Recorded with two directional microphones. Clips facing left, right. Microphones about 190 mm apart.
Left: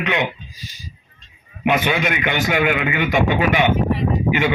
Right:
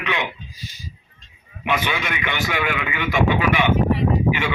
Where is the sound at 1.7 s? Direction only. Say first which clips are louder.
Left 5 dB; 45° left (ahead or behind).